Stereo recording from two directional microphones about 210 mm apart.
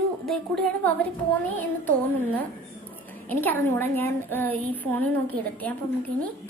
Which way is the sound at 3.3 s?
10° left (ahead or behind).